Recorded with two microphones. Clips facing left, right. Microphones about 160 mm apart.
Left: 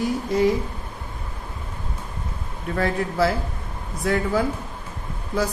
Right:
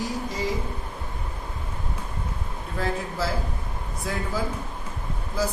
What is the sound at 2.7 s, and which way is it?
A woman's voice, 65° left (ahead or behind).